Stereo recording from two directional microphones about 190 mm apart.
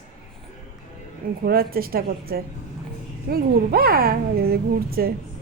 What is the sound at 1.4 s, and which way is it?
Speech, 50° right (ahead or behind).